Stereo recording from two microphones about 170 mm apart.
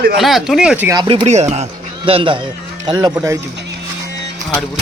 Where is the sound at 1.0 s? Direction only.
35° right (ahead or behind); by 3.4 s 15° right (ahead or behind).